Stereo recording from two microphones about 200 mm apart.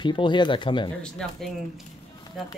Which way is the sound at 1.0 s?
5° left (ahead or behind).